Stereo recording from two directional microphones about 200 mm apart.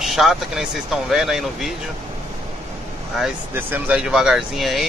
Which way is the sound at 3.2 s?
10° right (ahead or behind).